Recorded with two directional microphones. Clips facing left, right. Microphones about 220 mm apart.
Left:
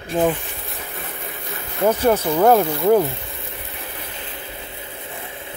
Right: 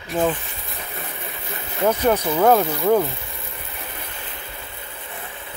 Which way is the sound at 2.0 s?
10° left (ahead or behind).